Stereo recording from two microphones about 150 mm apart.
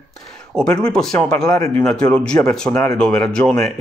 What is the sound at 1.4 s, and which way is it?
Speech, 20° left (ahead or behind).